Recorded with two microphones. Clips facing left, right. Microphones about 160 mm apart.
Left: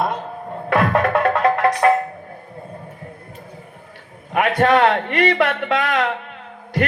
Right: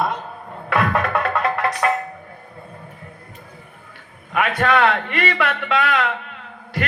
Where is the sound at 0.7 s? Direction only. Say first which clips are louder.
Left 3 dB; 40° left (ahead or behind).